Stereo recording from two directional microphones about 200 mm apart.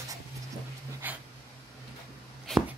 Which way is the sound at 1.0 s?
10° right (ahead or behind).